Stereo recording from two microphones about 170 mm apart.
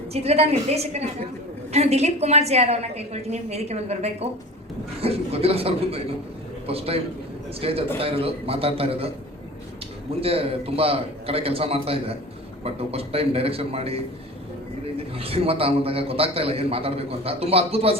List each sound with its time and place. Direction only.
0.1 s a man's voice: 35° right (ahead or behind)
10.2 s a man's voice: 35° right (ahead or behind)
15.2 s a man's voice: 35° right (ahead or behind)